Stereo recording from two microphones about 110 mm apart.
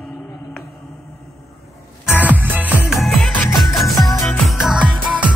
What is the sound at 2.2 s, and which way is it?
Music, 15° right (ahead or behind).